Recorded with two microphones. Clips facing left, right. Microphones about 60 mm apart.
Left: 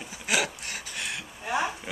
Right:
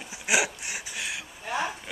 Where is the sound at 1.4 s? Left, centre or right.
Centre.